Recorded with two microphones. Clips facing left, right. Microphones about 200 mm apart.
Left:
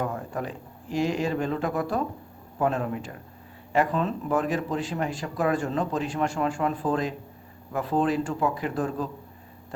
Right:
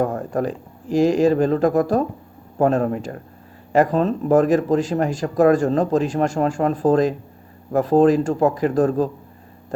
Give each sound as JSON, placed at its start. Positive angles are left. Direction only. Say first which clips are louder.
{"t": 0.0, "sound": "speech", "louder": "right 9 dB", "side_deg": -45}